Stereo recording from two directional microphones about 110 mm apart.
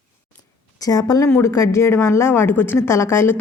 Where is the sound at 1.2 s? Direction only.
25° left (ahead or behind).